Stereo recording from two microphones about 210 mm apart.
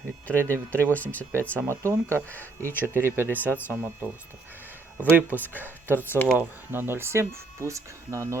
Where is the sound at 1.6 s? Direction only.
10° right (ahead or behind).